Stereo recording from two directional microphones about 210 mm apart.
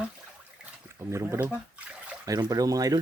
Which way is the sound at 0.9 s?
15° right (ahead or behind).